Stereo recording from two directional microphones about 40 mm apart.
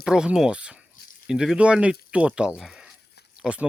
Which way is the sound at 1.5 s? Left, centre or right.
Right.